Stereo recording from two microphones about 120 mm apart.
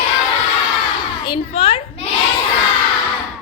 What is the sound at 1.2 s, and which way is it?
Speech, 45° left (ahead or behind).